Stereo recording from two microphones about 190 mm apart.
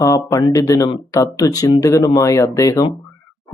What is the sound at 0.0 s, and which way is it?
Speech, 15° left (ahead or behind).